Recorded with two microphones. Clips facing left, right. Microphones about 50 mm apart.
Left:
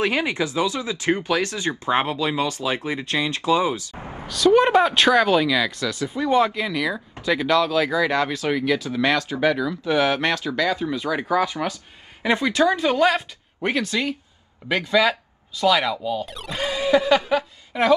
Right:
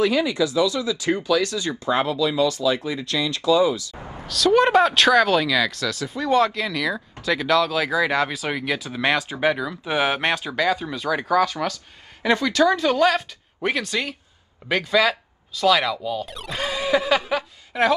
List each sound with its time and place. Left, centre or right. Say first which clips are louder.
0.0 s speech: right 2 dB; left
4.3 s speech: left 1 dB; centre